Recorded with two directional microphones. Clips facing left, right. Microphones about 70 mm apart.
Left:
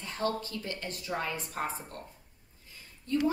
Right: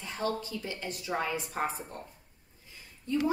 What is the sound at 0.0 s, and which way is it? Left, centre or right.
A woman's voice, centre.